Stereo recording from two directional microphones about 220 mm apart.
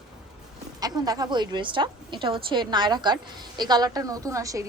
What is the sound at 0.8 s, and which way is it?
A woman's voice, 15° right (ahead or behind).